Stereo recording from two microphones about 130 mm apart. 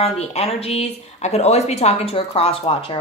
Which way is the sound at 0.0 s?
50° left (ahead or behind).